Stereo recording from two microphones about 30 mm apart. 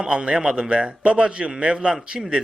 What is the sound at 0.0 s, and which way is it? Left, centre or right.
A man's voice, right.